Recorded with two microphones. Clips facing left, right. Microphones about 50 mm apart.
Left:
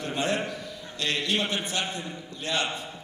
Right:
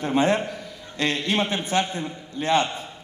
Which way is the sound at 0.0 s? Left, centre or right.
Right.